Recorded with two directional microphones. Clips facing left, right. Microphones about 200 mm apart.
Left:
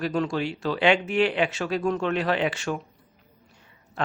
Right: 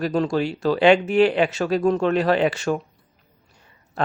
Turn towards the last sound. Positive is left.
turn(degrees=-40)  # may be behind; listen again after turning